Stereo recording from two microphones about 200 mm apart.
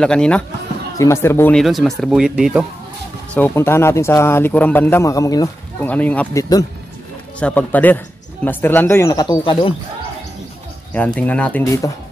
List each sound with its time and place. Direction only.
0.0 s speech: 5° left (ahead or behind)
3.3 s a man's voice: 10° left (ahead or behind); by 9.8 s 25° left (ahead or behind)
11.1 s a man's voice: 5° left (ahead or behind)
11.6 s a man's voice: 15° left (ahead or behind)